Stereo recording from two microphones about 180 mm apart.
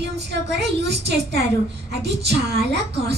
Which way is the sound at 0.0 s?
70° right (ahead or behind).